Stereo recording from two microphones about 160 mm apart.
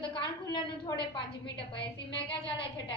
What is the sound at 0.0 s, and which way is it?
A woman's voice, 30° left (ahead or behind).